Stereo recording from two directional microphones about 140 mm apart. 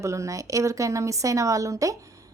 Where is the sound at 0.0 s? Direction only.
20° right (ahead or behind).